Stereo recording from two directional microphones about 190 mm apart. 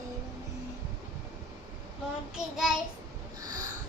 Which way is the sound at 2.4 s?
Centre (ahead or behind).